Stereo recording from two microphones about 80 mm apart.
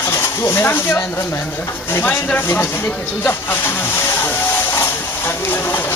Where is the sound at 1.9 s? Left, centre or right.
Left.